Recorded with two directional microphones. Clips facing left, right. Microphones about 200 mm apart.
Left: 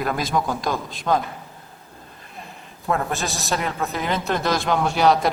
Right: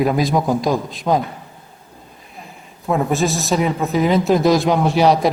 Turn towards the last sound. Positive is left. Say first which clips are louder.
# right 4 dB
turn(degrees=0)  # may be behind; listen again after turning